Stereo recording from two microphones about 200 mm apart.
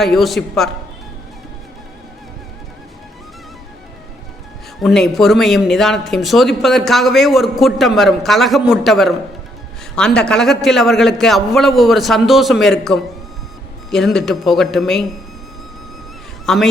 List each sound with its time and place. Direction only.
0.0 s speech: centre (ahead or behind)
4.8 s speech: centre (ahead or behind)
10.2 s speech: 5° left (ahead or behind)
16.5 s speech: centre (ahead or behind)